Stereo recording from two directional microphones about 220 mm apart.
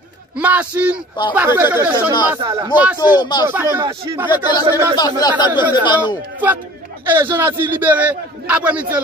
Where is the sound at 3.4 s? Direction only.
10° right (ahead or behind).